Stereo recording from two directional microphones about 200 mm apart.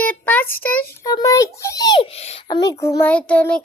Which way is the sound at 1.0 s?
20° left (ahead or behind).